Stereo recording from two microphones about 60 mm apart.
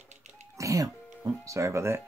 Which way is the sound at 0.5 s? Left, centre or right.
Right.